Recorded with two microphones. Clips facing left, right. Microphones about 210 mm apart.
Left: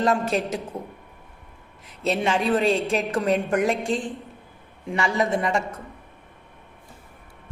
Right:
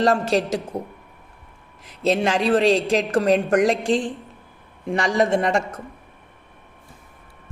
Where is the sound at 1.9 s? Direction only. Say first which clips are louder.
Right 3 dB; 90° right.